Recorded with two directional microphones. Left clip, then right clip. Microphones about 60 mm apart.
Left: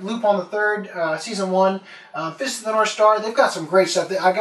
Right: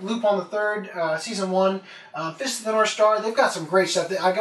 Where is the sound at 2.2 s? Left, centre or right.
Left.